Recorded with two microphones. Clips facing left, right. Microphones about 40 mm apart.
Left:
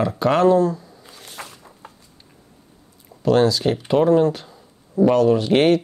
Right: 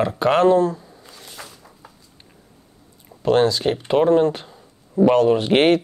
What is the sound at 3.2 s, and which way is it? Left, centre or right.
Speech, right.